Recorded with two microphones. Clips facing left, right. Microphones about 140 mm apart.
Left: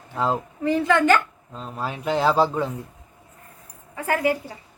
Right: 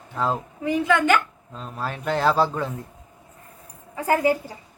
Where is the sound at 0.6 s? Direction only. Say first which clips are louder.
Left 1 dB; 15° right (ahead or behind).